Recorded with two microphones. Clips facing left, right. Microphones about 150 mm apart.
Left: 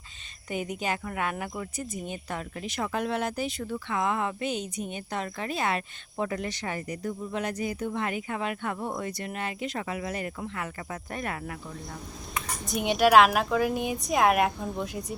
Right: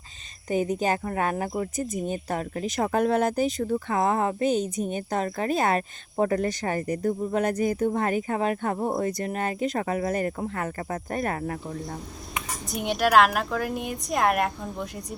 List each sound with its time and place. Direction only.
0.5 s speech: 40° right (ahead or behind)
12.6 s a woman's voice: centre (ahead or behind)